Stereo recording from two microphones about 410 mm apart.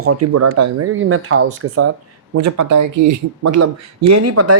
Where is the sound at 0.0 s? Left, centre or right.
Right.